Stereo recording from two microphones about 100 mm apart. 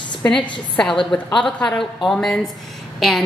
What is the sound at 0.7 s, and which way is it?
A woman's voice, 5° left (ahead or behind).